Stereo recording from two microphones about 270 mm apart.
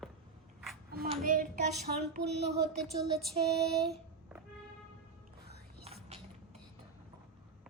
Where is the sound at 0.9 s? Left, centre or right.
Right.